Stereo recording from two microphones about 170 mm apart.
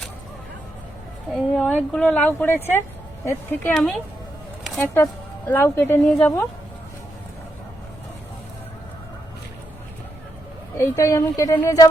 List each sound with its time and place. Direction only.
1.3 s speech: 5° left (ahead or behind)
3.8 s speech: centre (ahead or behind)
4.6 s a sound: 5° left (ahead or behind)
5.5 s speech: 15° left (ahead or behind)
10.8 s speech: 15° left (ahead or behind)